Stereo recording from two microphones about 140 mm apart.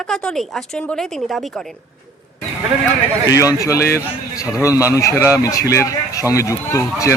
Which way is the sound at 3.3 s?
25° left (ahead or behind).